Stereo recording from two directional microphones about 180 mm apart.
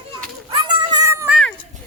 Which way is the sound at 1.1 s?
15° right (ahead or behind).